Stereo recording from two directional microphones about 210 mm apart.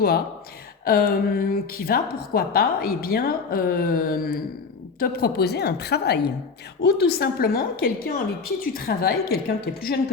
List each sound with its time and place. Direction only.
0.9 s a woman's voice: 45° left (ahead or behind)